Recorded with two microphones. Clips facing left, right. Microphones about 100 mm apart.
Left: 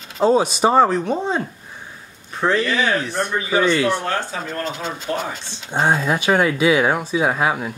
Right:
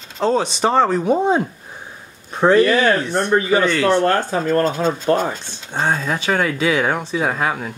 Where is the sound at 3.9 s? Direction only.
50° right (ahead or behind).